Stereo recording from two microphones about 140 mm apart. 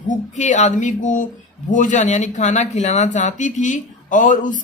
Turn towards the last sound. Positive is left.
turn(degrees=65)  # may be behind; listen again after turning